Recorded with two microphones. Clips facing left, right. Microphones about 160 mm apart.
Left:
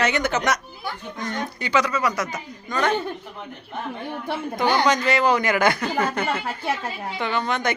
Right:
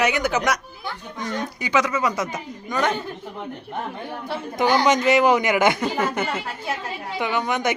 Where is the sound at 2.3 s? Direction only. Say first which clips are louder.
Right 1 dB; 5° right (ahead or behind).